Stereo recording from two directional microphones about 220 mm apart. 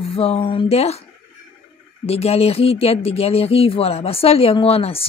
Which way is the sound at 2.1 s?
25° left (ahead or behind).